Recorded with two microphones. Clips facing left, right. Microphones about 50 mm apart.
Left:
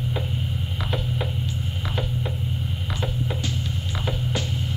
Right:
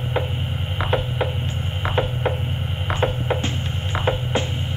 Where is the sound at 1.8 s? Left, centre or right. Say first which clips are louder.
Right 8 dB; right.